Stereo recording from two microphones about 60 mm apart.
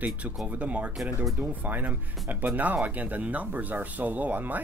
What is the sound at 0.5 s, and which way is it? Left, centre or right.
Speech, right.